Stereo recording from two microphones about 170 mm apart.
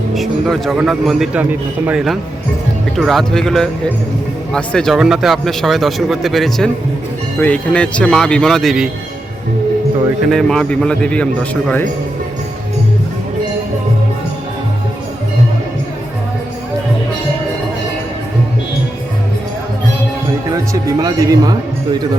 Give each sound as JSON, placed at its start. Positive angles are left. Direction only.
{"t": 0.1, "sound": "speech", "side_deg": 0}
{"t": 10.2, "sound": "speech", "side_deg": 5}
{"t": 21.0, "sound": "speech", "side_deg": -20}